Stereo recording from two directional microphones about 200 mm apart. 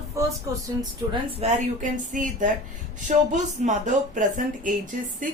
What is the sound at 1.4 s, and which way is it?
Speech, 40° right (ahead or behind).